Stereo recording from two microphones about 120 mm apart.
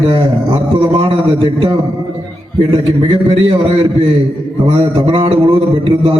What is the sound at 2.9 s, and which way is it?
Speech, 50° right (ahead or behind).